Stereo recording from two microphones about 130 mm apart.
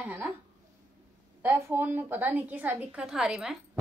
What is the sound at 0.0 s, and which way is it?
Speech, 15° right (ahead or behind).